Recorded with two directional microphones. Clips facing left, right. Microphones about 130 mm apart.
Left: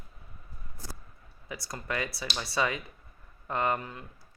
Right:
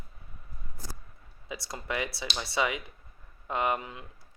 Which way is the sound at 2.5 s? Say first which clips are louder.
Even; 15° right (ahead or behind).